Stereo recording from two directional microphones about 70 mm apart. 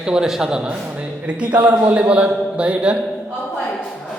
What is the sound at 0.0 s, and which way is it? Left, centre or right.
A man's voice, centre.